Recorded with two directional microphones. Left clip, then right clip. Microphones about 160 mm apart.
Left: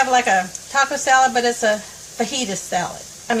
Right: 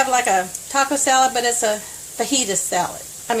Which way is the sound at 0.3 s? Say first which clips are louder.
Left 1 dB; 50° right (ahead or behind).